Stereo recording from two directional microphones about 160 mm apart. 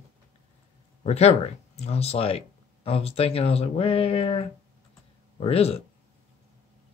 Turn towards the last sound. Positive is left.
turn(degrees=40)  # may be behind; listen again after turning